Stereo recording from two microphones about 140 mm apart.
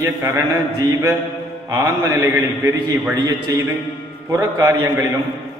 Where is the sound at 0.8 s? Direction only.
20° right (ahead or behind).